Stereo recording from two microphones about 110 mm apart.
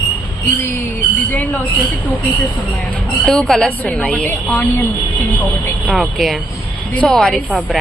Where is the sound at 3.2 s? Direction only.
5° left (ahead or behind).